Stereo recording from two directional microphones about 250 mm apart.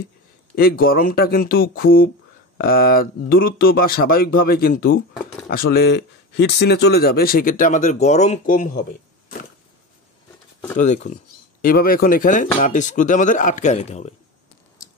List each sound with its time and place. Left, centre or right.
0.6 s speech: left
10.8 s speech: left